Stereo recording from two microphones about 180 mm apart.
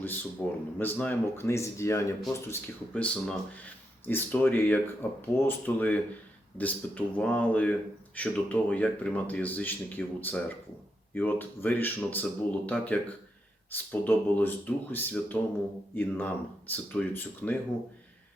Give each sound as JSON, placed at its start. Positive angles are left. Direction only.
{"t": 0.0, "sound": "speech", "side_deg": 10}